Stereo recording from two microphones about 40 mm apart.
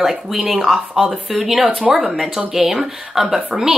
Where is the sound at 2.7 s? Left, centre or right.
Centre.